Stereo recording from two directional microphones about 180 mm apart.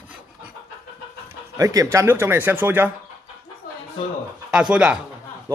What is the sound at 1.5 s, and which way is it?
Speech, 20° right (ahead or behind).